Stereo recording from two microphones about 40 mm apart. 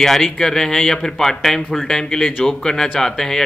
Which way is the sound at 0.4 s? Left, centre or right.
Centre.